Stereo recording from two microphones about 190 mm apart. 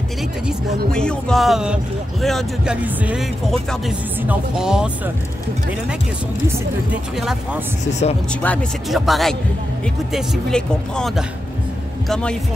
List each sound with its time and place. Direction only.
0.9 s speech: 5° left (ahead or behind)
6.4 s speech: 5° right (ahead or behind)
7.8 s speech: 35° left (ahead or behind)
8.3 s speech: 5° left (ahead or behind)